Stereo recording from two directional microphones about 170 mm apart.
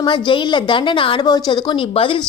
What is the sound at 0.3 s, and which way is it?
A woman's voice, 30° left (ahead or behind).